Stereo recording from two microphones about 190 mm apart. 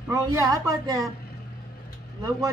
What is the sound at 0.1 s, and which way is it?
Speech, 15° right (ahead or behind).